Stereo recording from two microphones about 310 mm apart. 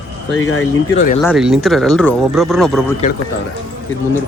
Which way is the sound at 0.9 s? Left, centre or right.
Left.